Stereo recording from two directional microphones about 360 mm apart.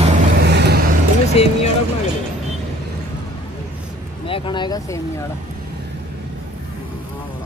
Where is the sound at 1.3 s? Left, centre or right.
Centre.